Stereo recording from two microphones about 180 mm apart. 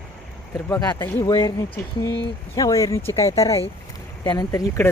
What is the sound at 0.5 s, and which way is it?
Speech, 15° left (ahead or behind).